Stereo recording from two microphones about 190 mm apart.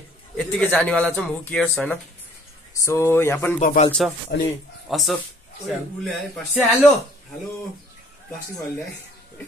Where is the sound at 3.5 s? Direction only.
40° left (ahead or behind).